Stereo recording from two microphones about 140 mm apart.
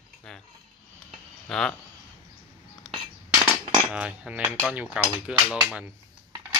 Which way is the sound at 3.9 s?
5° right (ahead or behind).